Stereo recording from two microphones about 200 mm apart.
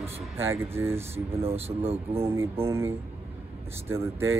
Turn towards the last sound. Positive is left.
turn(degrees=-15)  # may be behind; listen again after turning